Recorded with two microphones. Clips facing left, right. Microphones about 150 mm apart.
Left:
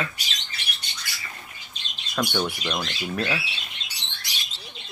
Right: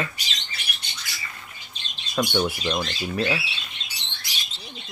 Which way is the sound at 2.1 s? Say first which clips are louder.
Right 2 dB; 5° right (ahead or behind).